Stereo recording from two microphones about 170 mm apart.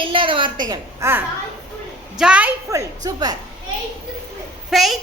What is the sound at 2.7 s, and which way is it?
Speech, 20° right (ahead or behind).